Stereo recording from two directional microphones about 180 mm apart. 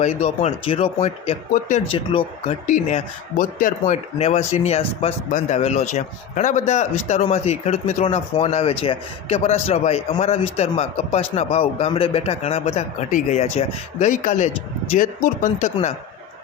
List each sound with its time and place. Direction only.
0.0 s a man's voice: 35° left (ahead or behind)
2.6 s a man's voice: 45° left (ahead or behind)